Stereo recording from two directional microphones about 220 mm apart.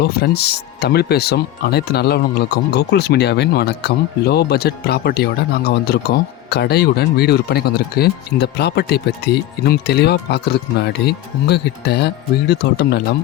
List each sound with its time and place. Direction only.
0.0 s speech: 45° left (ahead or behind)